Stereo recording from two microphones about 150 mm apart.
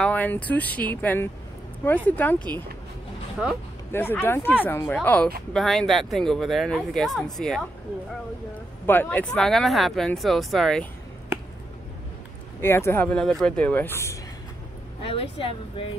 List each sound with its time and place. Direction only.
0.0 s speech: 10° left (ahead or behind)
3.4 s speech: 5° right (ahead or behind)
3.9 s speech: 15° left (ahead or behind)
8.8 s speech: 15° left (ahead or behind)
12.6 s speech: 15° left (ahead or behind)
15.0 s speech: 35° left (ahead or behind)